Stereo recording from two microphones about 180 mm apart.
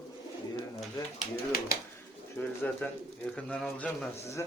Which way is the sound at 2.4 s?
10° left (ahead or behind).